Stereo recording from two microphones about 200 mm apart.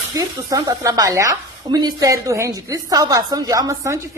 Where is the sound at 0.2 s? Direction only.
15° right (ahead or behind).